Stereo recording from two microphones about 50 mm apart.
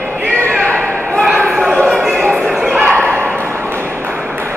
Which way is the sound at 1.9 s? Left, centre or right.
Centre.